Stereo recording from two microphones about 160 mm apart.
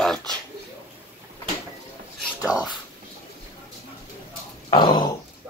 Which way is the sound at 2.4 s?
5° right (ahead or behind).